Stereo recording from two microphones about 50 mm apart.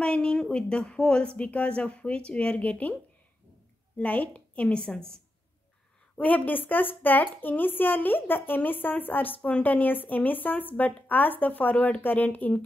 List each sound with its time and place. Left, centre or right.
0.0 s speech: centre
4.0 s speech: left
6.1 s speech: left
9.4 s speech: left